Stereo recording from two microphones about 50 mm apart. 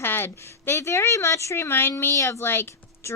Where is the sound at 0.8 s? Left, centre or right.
Left.